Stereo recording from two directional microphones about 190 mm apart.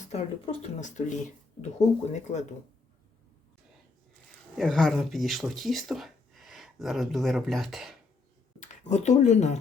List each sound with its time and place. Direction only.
0.1 s speech: 35° left (ahead or behind)
4.5 s speech: centre (ahead or behind)
8.6 s speech: 40° left (ahead or behind)